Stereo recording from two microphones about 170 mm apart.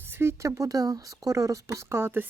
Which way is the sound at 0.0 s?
15° right (ahead or behind).